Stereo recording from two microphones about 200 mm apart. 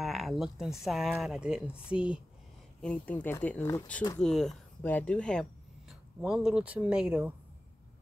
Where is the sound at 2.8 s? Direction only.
5° left (ahead or behind).